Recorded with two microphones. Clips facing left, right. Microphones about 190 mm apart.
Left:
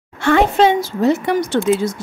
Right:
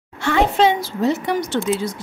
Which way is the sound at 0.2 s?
50° left (ahead or behind).